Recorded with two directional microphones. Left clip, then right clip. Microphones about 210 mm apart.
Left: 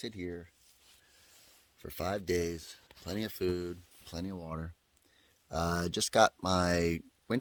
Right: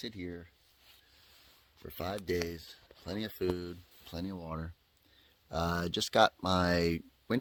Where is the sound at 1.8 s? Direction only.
40° left (ahead or behind).